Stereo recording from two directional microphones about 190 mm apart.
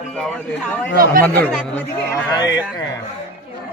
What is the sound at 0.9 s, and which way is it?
Speech, 50° right (ahead or behind).